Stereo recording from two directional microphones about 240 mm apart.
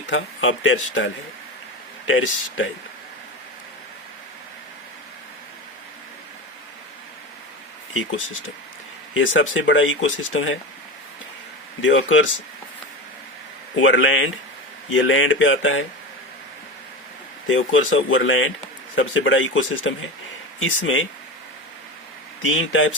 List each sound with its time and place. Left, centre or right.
0.1 s speech: left
9.1 s speech: left
11.8 s speech: left
13.7 s speech: left
17.5 s speech: left
22.4 s speech: left